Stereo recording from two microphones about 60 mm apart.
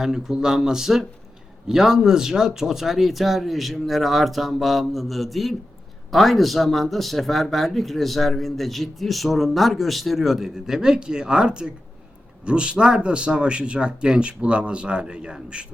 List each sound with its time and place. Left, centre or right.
0.0 s a man's voice: centre